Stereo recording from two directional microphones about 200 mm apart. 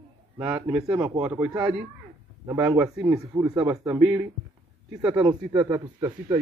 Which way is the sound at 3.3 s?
20° right (ahead or behind).